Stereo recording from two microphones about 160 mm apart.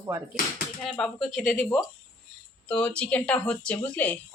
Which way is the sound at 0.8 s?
5° left (ahead or behind).